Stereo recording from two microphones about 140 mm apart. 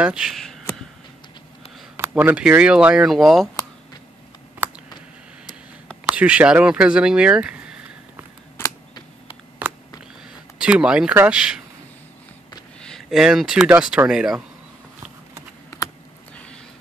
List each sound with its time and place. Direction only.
0.0 s speech: 5° right (ahead or behind)
2.0 s speech: 10° right (ahead or behind)
6.0 s speech: 10° right (ahead or behind)
8.6 s a sound: 15° left (ahead or behind)
10.6 s speech: 5° right (ahead or behind)
12.8 s speech: centre (ahead or behind)